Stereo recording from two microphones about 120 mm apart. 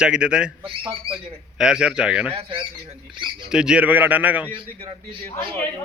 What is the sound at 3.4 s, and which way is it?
A man's voice, 5° right (ahead or behind).